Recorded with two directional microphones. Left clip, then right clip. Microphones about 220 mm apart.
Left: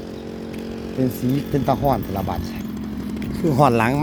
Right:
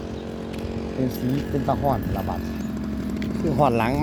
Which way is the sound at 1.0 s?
50° left (ahead or behind).